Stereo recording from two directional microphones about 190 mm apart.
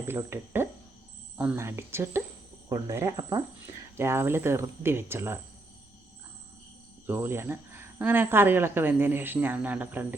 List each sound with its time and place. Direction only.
0.1 s speech: 10° right (ahead or behind)
7.1 s speech: 10° right (ahead or behind)